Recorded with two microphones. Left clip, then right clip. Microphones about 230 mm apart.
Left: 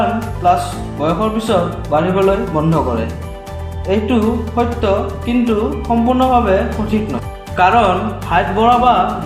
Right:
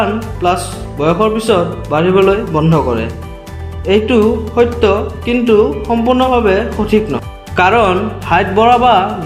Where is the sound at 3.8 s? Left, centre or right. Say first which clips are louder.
Right 5 dB; right.